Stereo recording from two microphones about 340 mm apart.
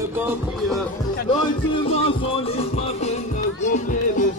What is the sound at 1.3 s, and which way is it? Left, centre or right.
Music, centre.